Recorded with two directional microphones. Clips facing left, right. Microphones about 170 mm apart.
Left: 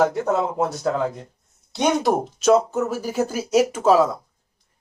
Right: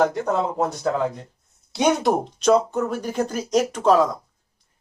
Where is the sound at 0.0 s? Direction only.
5° left (ahead or behind).